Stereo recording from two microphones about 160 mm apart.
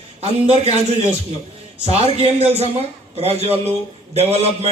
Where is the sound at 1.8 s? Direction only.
40° right (ahead or behind).